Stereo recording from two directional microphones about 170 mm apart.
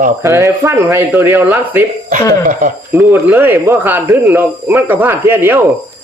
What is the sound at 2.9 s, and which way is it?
Speech, 15° right (ahead or behind).